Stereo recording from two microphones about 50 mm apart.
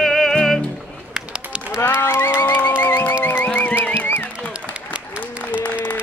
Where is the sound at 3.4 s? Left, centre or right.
Left.